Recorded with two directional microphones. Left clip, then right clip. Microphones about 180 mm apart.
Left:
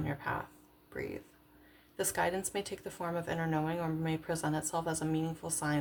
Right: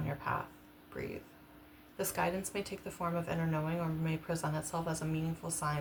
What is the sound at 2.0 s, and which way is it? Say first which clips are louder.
A woman's voice: left 2 dB; 45° left (ahead or behind).